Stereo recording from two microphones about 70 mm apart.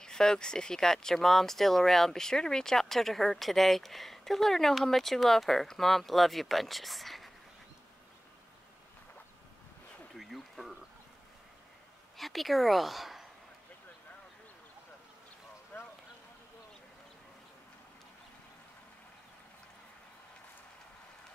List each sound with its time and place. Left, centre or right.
0.0 s speech: centre
10.1 s a sound: centre
12.2 s a woman's voice: centre
15.7 s clip-clop: left